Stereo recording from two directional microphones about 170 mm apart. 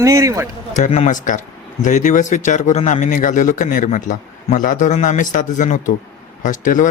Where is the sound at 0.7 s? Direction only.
45° left (ahead or behind).